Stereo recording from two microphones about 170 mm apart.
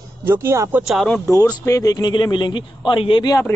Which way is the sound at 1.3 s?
20° left (ahead or behind).